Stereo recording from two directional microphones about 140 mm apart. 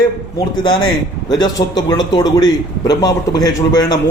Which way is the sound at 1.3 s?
30° left (ahead or behind).